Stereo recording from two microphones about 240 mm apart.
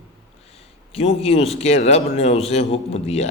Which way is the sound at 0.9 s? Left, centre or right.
Left.